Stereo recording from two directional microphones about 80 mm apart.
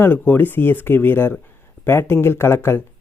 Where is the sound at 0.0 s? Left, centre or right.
Left.